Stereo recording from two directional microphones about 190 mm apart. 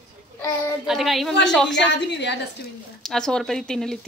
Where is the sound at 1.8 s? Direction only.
65° left (ahead or behind).